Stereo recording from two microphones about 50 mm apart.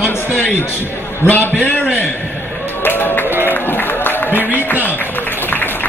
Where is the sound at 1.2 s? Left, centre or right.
Left.